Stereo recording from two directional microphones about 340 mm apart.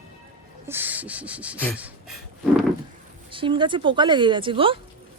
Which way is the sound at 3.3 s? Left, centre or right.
Centre.